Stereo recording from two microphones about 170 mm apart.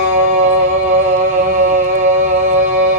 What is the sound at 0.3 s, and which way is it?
Music, 50° right (ahead or behind).